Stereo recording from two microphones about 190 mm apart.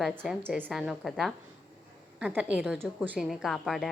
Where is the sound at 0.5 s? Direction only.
5° right (ahead or behind).